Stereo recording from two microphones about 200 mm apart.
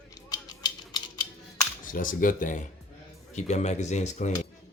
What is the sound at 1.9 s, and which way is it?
Speech, 45° left (ahead or behind).